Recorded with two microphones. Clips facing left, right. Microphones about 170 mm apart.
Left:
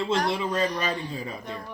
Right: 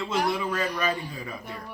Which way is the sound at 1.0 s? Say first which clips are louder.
Left 3 dB; 25° left (ahead or behind).